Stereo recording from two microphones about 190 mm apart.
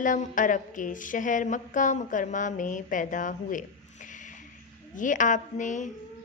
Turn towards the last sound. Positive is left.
turn(degrees=40)  # may be behind; listen again after turning